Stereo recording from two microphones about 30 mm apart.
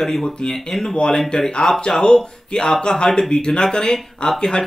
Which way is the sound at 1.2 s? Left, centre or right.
Centre.